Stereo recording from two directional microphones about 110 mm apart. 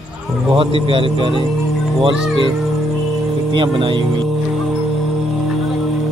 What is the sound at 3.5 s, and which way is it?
Speech, 50° right (ahead or behind).